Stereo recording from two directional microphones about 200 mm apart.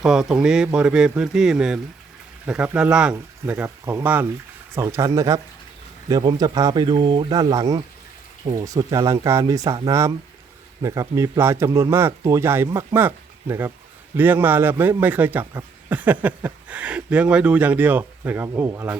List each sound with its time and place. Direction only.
0.0 s speech: 5° right (ahead or behind)